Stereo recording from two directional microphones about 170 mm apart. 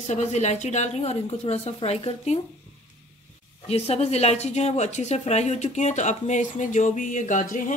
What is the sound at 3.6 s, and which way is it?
A woman's voice, 40° left (ahead or behind).